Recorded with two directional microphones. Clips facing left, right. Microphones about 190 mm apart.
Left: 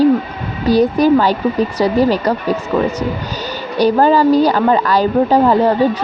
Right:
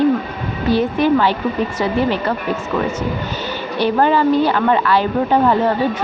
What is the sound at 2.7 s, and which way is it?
Speech, 10° left (ahead or behind).